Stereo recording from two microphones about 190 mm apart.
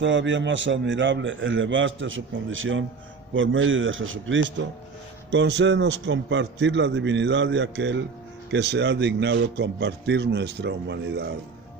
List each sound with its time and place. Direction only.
0.0 s a man's voice: 75° right (ahead or behind)